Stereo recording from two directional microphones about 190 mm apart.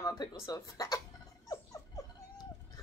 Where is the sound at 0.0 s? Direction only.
20° left (ahead or behind).